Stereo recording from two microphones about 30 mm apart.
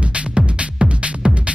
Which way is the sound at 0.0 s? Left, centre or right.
Right.